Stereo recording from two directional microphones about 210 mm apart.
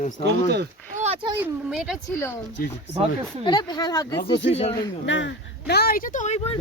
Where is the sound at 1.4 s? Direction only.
5° right (ahead or behind).